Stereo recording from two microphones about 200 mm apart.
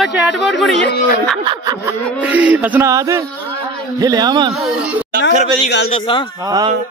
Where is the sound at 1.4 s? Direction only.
20° right (ahead or behind).